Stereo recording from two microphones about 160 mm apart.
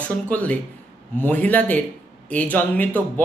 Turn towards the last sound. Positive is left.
turn(degrees=10)  # may be behind; listen again after turning